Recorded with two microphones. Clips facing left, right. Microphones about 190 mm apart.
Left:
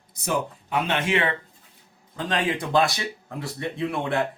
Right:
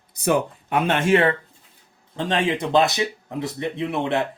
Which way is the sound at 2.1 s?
25° right (ahead or behind).